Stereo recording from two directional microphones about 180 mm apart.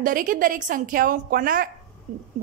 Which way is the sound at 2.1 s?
40° right (ahead or behind).